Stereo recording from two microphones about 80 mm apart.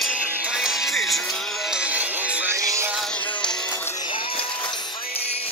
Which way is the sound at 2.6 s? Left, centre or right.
Right.